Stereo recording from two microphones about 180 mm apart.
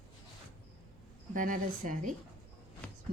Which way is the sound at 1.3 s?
50° right (ahead or behind).